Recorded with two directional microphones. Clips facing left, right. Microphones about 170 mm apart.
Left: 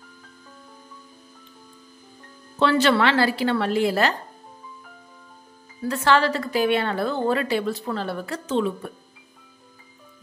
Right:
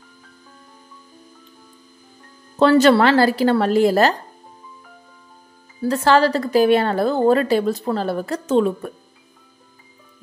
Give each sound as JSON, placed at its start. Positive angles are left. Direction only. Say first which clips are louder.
{"t": 2.6, "sound": "speech", "louder": "right 6 dB", "side_deg": -40}
{"t": 5.8, "sound": "speech", "louder": "right 5 dB", "side_deg": -35}